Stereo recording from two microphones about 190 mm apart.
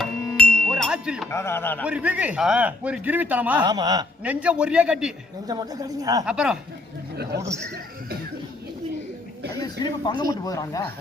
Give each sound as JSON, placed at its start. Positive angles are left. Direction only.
{"t": 0.3, "sound": "music", "side_deg": 5}
{"t": 1.3, "sound": "a man's voice", "side_deg": 15}
{"t": 1.8, "sound": "a man's voice", "side_deg": -5}
{"t": 3.6, "sound": "a woman's voice", "side_deg": -20}
{"t": 4.2, "sound": "a man's voice", "side_deg": -5}
{"t": 5.5, "sound": "a woman's voice", "side_deg": -20}
{"t": 6.2, "sound": "a man's voice", "side_deg": -5}
{"t": 7.3, "sound": "speech", "side_deg": -60}
{"t": 9.6, "sound": "speech", "side_deg": 20}